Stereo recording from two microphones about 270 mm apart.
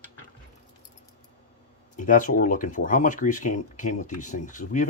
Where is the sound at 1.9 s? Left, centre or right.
Left.